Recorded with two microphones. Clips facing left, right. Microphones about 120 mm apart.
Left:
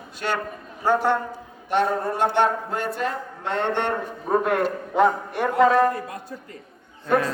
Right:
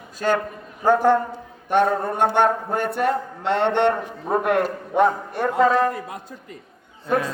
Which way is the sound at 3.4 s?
75° right (ahead or behind).